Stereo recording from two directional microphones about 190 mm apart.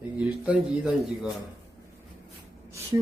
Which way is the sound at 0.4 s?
Centre (ahead or behind).